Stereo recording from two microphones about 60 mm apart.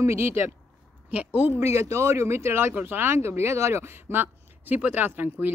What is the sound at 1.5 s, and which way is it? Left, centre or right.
Speech, right.